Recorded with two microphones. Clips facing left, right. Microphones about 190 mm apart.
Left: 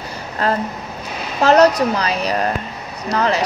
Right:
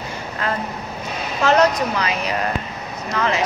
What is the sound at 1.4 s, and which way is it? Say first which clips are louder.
Speech: left 4 dB; 35° left (ahead or behind).